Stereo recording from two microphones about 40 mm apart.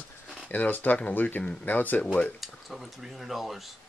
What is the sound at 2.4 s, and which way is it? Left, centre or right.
Speech, centre.